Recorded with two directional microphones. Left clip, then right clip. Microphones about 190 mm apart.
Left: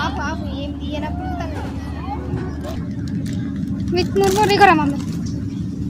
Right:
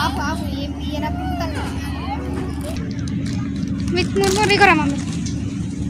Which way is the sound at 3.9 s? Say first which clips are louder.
Left 2 dB; 40° left (ahead or behind).